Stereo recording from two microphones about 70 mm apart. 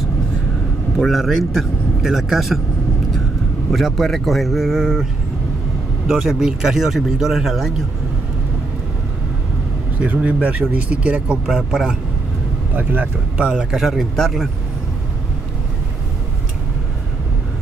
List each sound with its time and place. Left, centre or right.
0.9 s a man's voice: centre
3.7 s a man's voice: centre
6.0 s speech: centre
9.9 s speech: right
12.7 s speech: right
13.5 s speech: centre